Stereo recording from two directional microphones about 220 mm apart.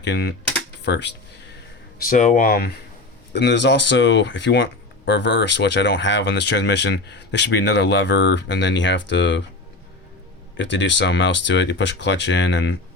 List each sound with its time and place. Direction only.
0.0 s speech: 50° left (ahead or behind)
2.0 s speech: 35° left (ahead or behind); by 9.4 s 55° left (ahead or behind)
10.6 s speech: 55° left (ahead or behind)